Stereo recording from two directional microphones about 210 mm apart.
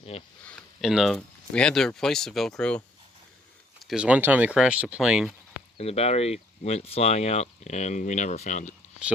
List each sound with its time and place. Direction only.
0.0 s speech: 25° left (ahead or behind)
0.4 s speech: centre (ahead or behind)
3.8 s speech: 5° right (ahead or behind)
5.7 s speech: 30° left (ahead or behind)